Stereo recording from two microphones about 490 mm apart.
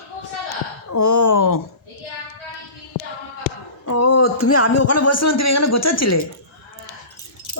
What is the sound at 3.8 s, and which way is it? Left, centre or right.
Speech, left.